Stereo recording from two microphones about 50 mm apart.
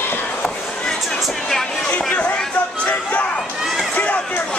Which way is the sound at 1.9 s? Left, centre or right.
Left.